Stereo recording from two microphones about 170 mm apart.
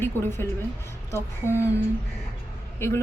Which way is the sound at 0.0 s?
15° left (ahead or behind).